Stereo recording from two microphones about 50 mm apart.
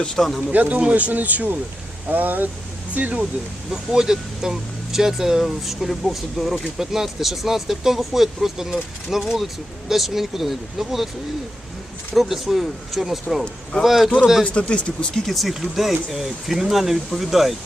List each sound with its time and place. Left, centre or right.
0.0 s speech: centre
0.5 s speech: right
3.7 s speech: centre
12.1 s speech: centre
14.4 s speech: left
15.3 s speech: centre